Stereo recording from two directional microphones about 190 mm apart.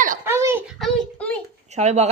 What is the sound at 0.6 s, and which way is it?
Speech, centre (ahead or behind).